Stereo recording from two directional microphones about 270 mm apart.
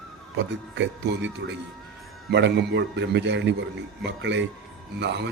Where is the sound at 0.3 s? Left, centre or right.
Right.